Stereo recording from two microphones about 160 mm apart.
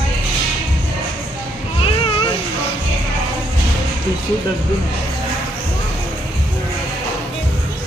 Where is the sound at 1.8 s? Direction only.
30° left (ahead or behind).